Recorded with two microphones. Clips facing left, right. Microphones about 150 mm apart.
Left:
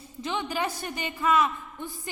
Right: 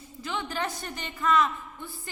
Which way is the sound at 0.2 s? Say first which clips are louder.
Left 3 dB; 15° left (ahead or behind).